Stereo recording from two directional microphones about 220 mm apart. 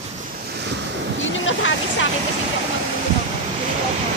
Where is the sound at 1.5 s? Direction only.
60° left (ahead or behind).